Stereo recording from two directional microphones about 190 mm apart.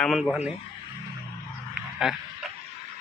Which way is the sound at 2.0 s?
5° right (ahead or behind).